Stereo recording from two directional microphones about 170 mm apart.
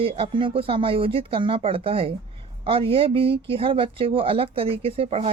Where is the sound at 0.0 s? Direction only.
35° right (ahead or behind).